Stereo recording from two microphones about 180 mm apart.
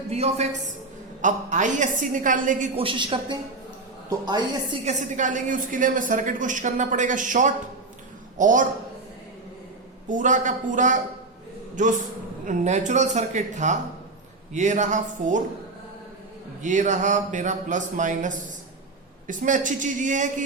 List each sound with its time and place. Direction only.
0.1 s a woman's voice: 35° right (ahead or behind)
2.7 s a woman's voice: 30° right (ahead or behind)
4.9 s a woman's voice: 45° right (ahead or behind)
10.1 s a woman's voice: 40° right (ahead or behind)
16.6 s a woman's voice: 40° right (ahead or behind)